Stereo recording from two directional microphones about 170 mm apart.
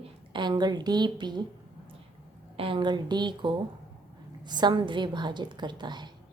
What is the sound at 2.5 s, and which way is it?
A woman's voice, 30° right (ahead or behind).